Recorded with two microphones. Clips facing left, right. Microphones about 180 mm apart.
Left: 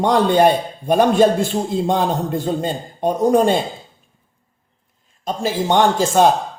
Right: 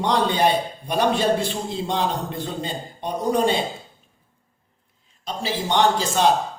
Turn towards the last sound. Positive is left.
turn(degrees=50)  # may be behind; listen again after turning